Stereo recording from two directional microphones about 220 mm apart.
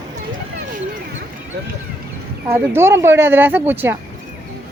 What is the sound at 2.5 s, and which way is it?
Speech, 10° right (ahead or behind).